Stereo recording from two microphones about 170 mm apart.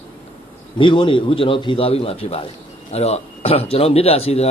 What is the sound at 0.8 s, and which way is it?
Speech, 30° left (ahead or behind).